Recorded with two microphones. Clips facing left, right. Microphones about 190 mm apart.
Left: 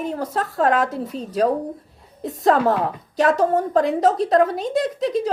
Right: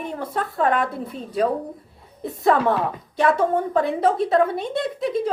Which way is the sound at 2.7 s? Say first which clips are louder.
Left 1 dB; 90° left.